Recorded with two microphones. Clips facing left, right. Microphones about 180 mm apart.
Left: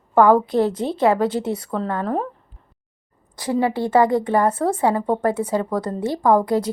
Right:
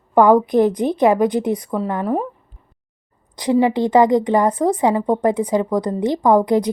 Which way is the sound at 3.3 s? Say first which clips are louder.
Right 5 dB; 15° right (ahead or behind).